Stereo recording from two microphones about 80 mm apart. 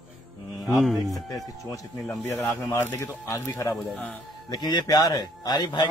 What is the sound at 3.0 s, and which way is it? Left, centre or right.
Speech, left.